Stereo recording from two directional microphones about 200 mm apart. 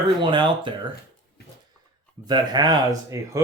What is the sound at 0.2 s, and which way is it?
Speech, 25° right (ahead or behind).